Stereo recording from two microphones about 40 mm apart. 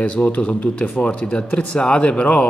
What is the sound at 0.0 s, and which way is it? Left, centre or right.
A man's voice, left.